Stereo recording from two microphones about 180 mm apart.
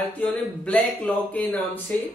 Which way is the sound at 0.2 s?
10° left (ahead or behind).